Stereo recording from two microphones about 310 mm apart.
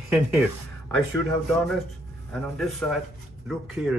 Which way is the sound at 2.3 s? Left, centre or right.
Centre.